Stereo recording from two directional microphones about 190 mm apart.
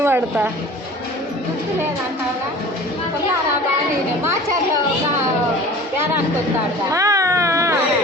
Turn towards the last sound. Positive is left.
turn(degrees=-15)  # may be behind; listen again after turning